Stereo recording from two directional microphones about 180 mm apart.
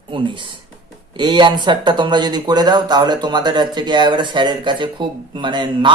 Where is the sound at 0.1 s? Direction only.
25° right (ahead or behind).